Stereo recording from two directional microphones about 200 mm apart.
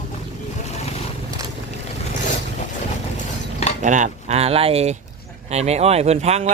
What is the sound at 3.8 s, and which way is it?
Speech, 40° right (ahead or behind).